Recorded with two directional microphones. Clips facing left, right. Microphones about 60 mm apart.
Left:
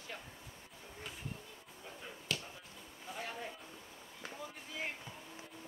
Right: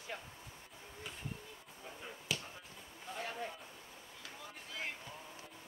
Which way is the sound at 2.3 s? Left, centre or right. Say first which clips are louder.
Even; centre.